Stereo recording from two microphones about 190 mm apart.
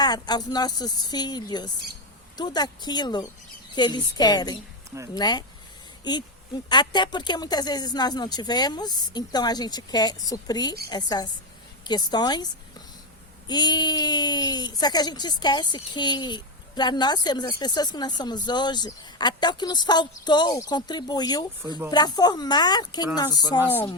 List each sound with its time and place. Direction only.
0.0 s speech: 20° left (ahead or behind)
13.5 s speech: 20° left (ahead or behind)